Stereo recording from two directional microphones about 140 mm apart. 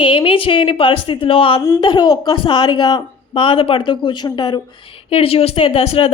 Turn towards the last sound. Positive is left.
turn(degrees=45)  # may be behind; listen again after turning